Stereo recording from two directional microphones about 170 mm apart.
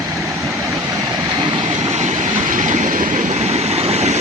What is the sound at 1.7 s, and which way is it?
Train, 40° right (ahead or behind).